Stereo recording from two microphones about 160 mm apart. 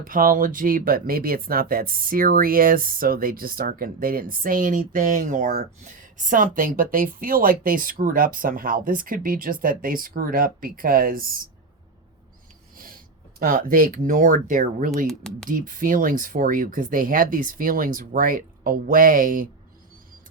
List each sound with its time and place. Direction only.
0.0 s speech: 60° right (ahead or behind)
12.7 s a sound: 60° right (ahead or behind)
13.4 s speech: 65° right (ahead or behind)
15.0 s speech: 5° left (ahead or behind)
15.4 s speech: 60° right (ahead or behind)